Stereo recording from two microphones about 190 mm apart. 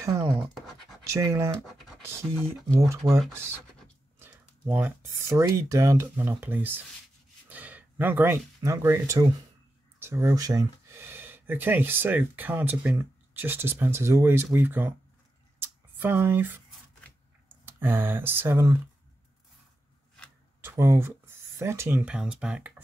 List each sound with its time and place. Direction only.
0.0 s speech: 15° right (ahead or behind)
15.6 s a sound: 10° right (ahead or behind)
17.6 s speech: 10° right (ahead or behind)
20.6 s speech: 15° right (ahead or behind)